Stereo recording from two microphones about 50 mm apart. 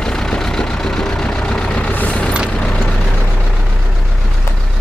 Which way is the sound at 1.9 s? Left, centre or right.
Left.